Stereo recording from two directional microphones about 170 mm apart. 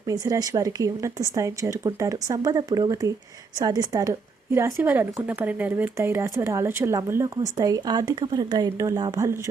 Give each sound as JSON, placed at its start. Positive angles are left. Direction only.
{"t": 0.1, "sound": "a woman's voice", "side_deg": -20}